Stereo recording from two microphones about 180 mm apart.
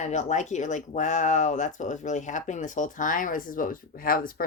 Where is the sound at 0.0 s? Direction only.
40° left (ahead or behind).